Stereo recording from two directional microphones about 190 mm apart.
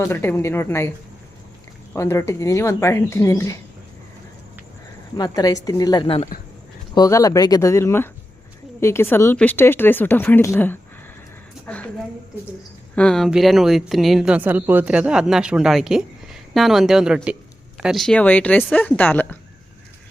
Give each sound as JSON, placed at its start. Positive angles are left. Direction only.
{"t": 0.0, "sound": "speech", "side_deg": 10}
{"t": 1.9, "sound": "speech", "side_deg": 15}
{"t": 5.1, "sound": "a woman's voice", "side_deg": 20}
{"t": 13.0, "sound": "a woman's voice", "side_deg": 5}